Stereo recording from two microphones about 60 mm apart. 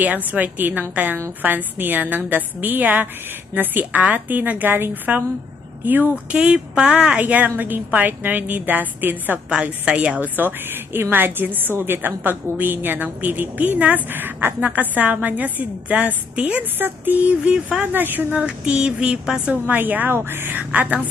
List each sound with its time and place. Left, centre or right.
0.0 s a woman's voice: right
6.3 s a woman's voice: centre
9.5 s a woman's voice: centre
10.3 s a woman's voice: right
16.7 s a woman's voice: right; by 17.8 s centre
17.9 s a woman's voice: right
18.3 s a sound: centre
19.5 s a woman's voice: right